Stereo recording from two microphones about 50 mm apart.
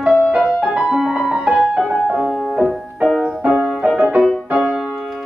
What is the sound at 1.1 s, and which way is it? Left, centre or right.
Music, right.